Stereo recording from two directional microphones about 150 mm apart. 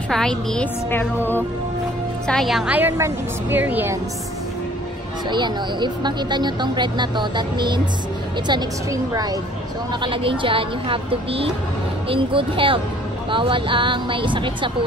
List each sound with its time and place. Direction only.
0.1 s a woman's voice: 5° left (ahead or behind)
0.8 s music: 15° left (ahead or behind)
2.2 s a woman's voice: centre (ahead or behind)
5.3 s speech: 30° right (ahead or behind)
10.0 s a woman's voice: 35° right (ahead or behind)